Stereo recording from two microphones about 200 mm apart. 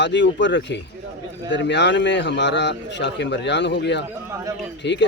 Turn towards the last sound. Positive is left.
turn(degrees=60)  # may be behind; listen again after turning